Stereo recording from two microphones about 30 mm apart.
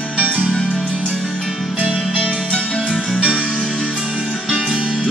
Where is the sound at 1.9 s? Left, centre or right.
Right.